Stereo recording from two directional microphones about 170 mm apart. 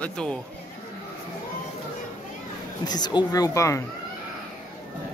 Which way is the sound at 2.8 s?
25° left (ahead or behind).